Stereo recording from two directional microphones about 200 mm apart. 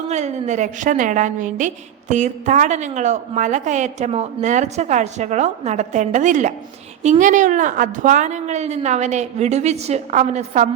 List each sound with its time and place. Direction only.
0.1 s a woman's voice: 35° right (ahead or behind)